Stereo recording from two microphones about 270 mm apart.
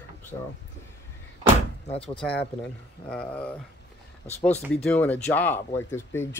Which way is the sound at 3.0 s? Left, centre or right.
Centre.